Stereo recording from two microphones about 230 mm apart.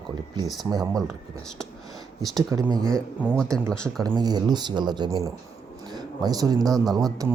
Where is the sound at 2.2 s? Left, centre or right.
Centre.